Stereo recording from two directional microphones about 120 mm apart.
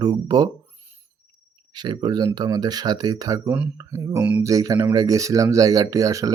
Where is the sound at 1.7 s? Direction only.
35° right (ahead or behind).